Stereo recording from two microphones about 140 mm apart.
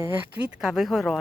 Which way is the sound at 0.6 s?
5° right (ahead or behind).